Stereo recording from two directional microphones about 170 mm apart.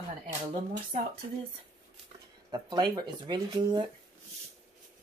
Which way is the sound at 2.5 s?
25° right (ahead or behind).